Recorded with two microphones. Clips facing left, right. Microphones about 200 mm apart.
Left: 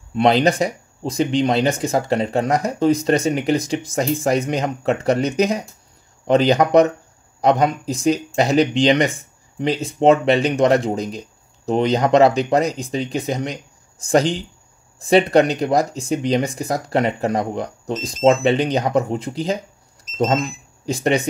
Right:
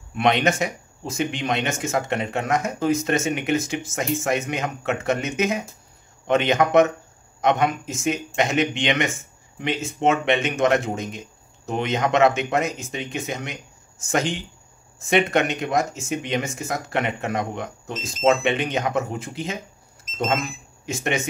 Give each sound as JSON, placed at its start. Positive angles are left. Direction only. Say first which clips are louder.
{"t": 0.1, "sound": "speech", "louder": "left 5 dB", "side_deg": 30}